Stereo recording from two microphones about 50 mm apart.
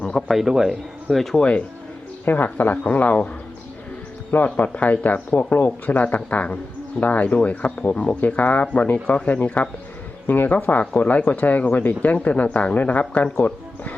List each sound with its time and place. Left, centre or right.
0.0 s a sound: centre
0.3 s speech: centre
1.1 s speech: centre
1.4 s speech: left
2.2 s speech: left
4.3 s speech: left
13.4 s speech: left